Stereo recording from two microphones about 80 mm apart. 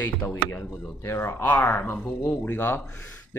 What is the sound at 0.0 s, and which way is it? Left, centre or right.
Speech, left.